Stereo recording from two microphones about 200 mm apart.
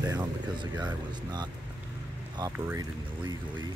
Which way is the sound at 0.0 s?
20° right (ahead or behind).